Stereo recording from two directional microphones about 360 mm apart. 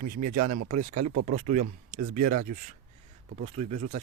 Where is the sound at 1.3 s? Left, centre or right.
Centre.